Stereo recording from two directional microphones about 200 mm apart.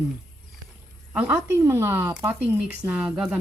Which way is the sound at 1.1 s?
10° right (ahead or behind).